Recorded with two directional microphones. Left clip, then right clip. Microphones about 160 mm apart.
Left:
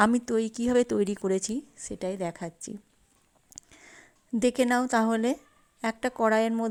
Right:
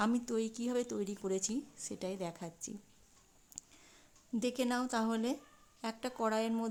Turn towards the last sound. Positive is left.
turn(degrees=35)  # may be behind; listen again after turning